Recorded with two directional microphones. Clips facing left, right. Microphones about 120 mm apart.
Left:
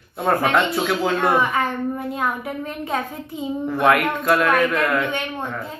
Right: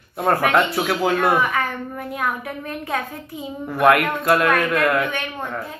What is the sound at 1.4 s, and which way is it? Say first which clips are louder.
A woman's voice: left 1 dB; 25° left (ahead or behind).